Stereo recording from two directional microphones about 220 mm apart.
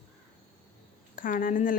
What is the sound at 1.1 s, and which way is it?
Speech, 40° left (ahead or behind).